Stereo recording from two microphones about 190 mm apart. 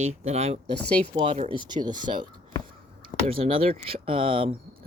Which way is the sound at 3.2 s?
35° right (ahead or behind).